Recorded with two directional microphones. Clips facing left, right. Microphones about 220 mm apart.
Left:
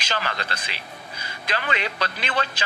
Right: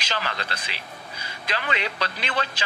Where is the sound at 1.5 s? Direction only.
50° left (ahead or behind).